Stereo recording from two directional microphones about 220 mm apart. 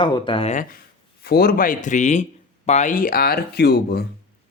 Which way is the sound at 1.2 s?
45° left (ahead or behind).